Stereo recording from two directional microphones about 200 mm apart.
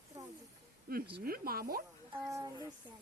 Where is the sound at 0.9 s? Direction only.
50° right (ahead or behind).